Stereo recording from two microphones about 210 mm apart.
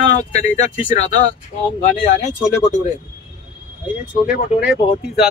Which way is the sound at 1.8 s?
35° left (ahead or behind).